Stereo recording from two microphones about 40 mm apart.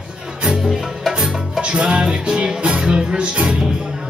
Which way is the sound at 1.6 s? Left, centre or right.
Right.